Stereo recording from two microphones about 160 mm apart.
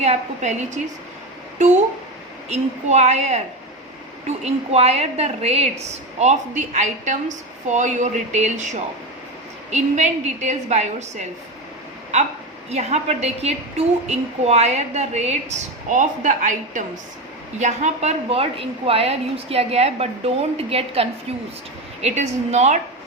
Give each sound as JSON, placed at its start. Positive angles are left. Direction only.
{"t": 0.0, "sound": "a woman's voice", "side_deg": -45}
{"t": 2.5, "sound": "a woman's voice", "side_deg": -45}
{"t": 12.7, "sound": "a woman's voice", "side_deg": -45}